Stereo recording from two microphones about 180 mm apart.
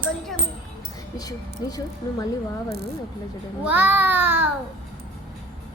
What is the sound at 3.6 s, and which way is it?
Babbling, 10° right (ahead or behind).